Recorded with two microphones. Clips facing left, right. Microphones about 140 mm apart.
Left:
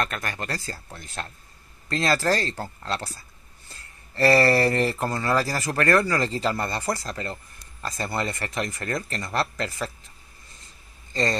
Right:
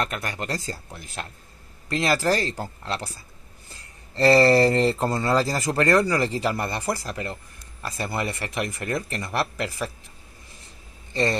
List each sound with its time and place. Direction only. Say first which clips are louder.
0.0 s speech: right 1 dB; 15° right (ahead or behind)
3.7 s speech: right 3 dB; 25° right (ahead or behind)